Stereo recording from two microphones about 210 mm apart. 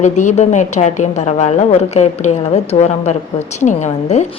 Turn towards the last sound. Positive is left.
turn(degrees=35)  # may be behind; listen again after turning